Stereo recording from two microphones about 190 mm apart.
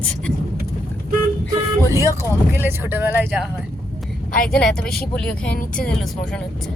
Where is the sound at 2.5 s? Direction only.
10° right (ahead or behind).